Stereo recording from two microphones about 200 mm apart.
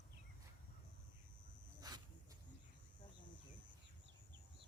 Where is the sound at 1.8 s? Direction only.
20° right (ahead or behind).